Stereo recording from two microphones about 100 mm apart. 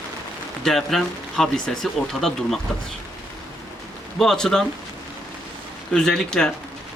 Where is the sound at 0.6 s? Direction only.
5° left (ahead or behind).